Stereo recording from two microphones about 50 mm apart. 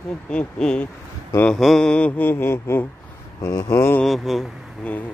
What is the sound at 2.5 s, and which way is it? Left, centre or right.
Speech, left.